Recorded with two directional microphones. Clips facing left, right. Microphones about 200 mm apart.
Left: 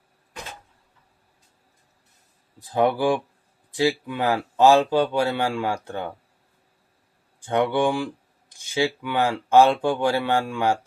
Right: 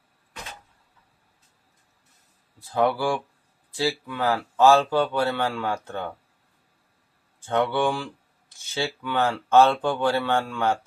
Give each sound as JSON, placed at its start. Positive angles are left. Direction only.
{"t": 2.6, "sound": "speech", "side_deg": 20}
{"t": 7.4, "sound": "speech", "side_deg": 15}